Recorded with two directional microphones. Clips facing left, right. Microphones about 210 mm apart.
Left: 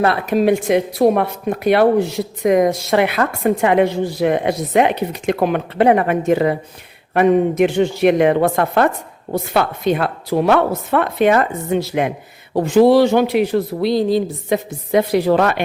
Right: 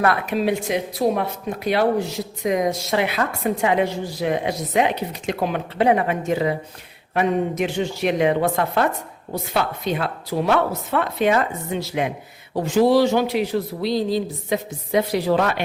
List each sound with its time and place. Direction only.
0.3 s speech: 50° left (ahead or behind)